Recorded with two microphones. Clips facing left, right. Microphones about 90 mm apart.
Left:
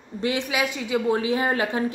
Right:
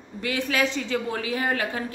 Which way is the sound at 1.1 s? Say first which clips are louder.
Left 4 dB; 25° left (ahead or behind).